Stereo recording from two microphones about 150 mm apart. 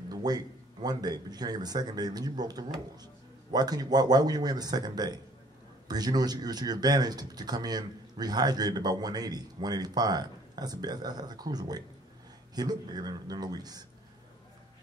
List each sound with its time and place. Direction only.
0.1 s speech: 25° right (ahead or behind)